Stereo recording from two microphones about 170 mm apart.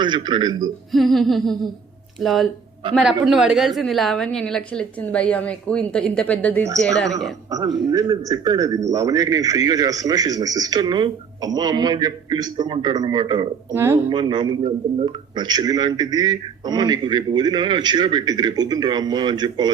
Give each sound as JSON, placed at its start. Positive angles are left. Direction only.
{"t": 0.0, "sound": "a man's voice", "side_deg": -25}
{"t": 0.9, "sound": "a woman's voice", "side_deg": 0}
{"t": 7.9, "sound": "a man's voice", "side_deg": -20}
{"t": 13.7, "sound": "speech", "side_deg": -15}
{"t": 14.1, "sound": "a man's voice", "side_deg": -25}